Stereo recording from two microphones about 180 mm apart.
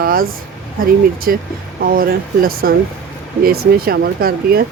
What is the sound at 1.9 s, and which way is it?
Speech, 55° right (ahead or behind).